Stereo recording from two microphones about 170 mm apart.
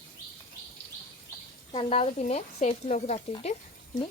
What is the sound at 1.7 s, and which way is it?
Speech, 35° left (ahead or behind).